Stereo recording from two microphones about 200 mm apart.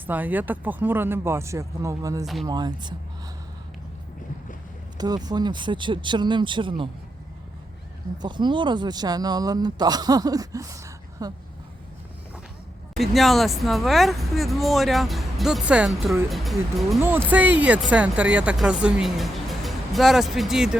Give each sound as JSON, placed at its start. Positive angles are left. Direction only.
{"t": 0.1, "sound": "a man's voice", "side_deg": -10}
{"t": 4.9, "sound": "a man's voice", "side_deg": -20}
{"t": 8.2, "sound": "a man's voice", "side_deg": -20}
{"t": 12.9, "sound": "speech", "side_deg": 0}
{"t": 17.0, "sound": "speech", "side_deg": -10}